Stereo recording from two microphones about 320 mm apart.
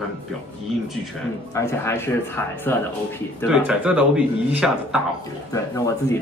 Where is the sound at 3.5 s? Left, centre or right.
Centre.